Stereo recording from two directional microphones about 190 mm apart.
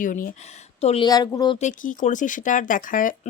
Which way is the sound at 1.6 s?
45° left (ahead or behind).